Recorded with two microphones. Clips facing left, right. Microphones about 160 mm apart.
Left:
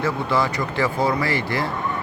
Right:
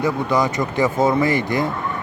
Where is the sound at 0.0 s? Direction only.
15° right (ahead or behind).